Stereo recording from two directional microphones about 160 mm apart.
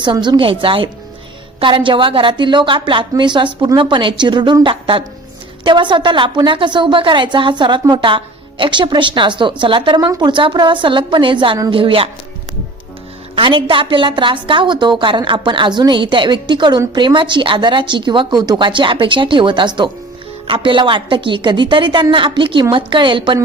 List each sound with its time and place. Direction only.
0.0 s a woman's voice: 30° right (ahead or behind)
13.3 s a woman's voice: 30° right (ahead or behind)